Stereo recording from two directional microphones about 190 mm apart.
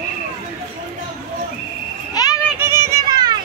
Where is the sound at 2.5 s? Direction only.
15° right (ahead or behind).